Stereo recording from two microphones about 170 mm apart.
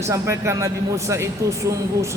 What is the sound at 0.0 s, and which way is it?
A man's voice, 15° right (ahead or behind).